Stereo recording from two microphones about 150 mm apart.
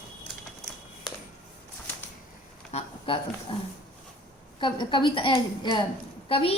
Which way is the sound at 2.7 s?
40° left (ahead or behind).